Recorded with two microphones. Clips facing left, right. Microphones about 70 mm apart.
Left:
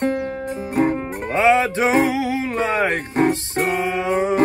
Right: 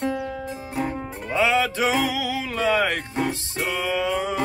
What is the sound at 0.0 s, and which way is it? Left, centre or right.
Music, left.